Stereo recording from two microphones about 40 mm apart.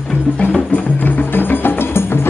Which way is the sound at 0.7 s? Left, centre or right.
Left.